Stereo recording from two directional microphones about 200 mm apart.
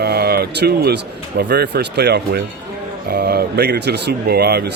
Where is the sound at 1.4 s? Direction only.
55° right (ahead or behind).